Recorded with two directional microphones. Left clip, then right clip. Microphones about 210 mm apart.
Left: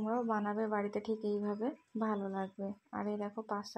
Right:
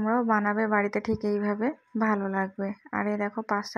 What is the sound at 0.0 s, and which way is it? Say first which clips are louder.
Speech: right 10 dB; 30° right (ahead or behind).